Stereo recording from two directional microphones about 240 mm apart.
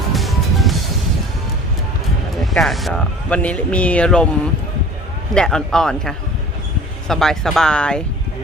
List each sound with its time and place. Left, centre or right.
0.1 s music: centre
2.4 s speech: centre
5.3 s speech: centre